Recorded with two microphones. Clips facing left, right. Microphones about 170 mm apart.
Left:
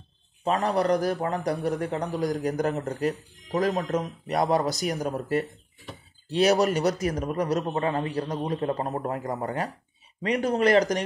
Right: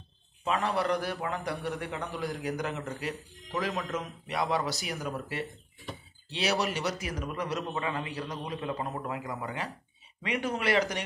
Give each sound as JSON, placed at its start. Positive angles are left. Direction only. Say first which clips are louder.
{"t": 0.4, "sound": "a man's voice", "louder": "left 5 dB", "side_deg": 40}